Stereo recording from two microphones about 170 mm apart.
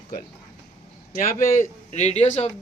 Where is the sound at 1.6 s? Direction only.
40° left (ahead or behind).